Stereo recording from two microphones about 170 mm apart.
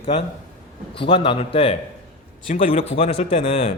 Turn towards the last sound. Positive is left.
turn(degrees=35)  # may be behind; listen again after turning